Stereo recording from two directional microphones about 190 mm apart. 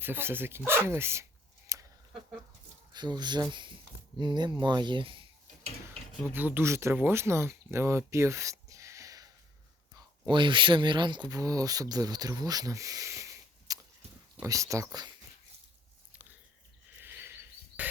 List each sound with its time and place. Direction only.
0.0 s speech: 10° right (ahead or behind)
2.9 s speech: 20° right (ahead or behind)
6.2 s speech: 10° right (ahead or behind)
17.0 s cricket: 10° right (ahead or behind)